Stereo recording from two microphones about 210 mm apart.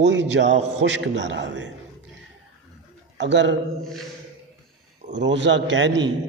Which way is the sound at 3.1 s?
60° right (ahead or behind).